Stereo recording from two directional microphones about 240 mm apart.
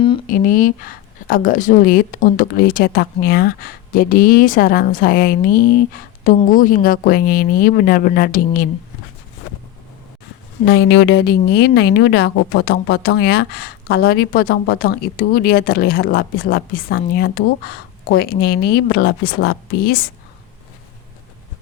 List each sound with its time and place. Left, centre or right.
0.3 s speech: left
10.7 s speech: left